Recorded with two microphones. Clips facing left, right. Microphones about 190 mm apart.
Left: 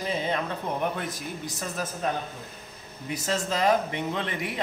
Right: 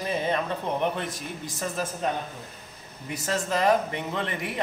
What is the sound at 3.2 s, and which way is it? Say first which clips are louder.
Speech: right 1 dB; 15° left (ahead or behind).